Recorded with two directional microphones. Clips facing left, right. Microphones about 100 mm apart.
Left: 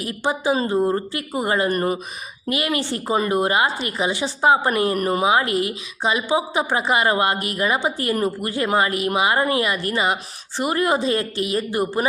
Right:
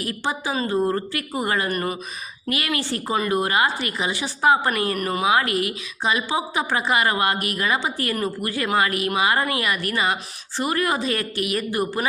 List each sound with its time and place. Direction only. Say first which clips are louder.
0.0 s a woman's voice: left 4 dB; 20° left (ahead or behind)
4.9 s a woman's voice: left 2 dB; 35° left (ahead or behind)